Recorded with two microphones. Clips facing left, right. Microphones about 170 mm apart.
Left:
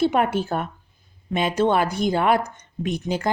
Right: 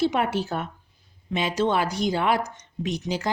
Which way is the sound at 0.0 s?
50° left (ahead or behind).